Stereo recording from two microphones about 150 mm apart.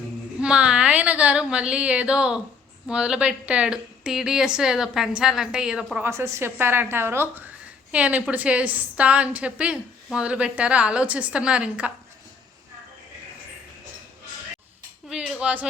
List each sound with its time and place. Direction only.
0.3 s a woman's voice: 5° right (ahead or behind)
6.1 s a woman's voice: 20° right (ahead or behind)
15.1 s a woman's voice: 5° right (ahead or behind)